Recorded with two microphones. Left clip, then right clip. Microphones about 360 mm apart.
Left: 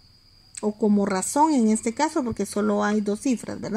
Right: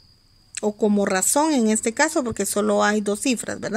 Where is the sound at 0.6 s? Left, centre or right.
Right.